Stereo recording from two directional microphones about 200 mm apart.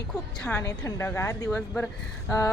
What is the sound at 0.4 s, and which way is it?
Speech, 15° left (ahead or behind).